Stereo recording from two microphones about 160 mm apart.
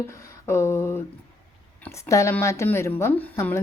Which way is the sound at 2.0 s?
20° left (ahead or behind).